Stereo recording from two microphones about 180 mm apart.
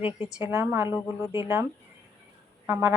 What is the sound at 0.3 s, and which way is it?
A woman's voice, 10° right (ahead or behind).